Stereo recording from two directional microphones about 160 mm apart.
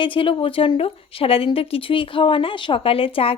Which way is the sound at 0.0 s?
30° left (ahead or behind).